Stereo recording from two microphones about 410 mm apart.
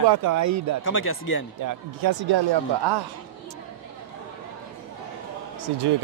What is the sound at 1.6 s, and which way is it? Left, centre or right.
Speech, right.